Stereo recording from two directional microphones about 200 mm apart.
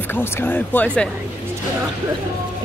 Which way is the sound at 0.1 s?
10° left (ahead or behind).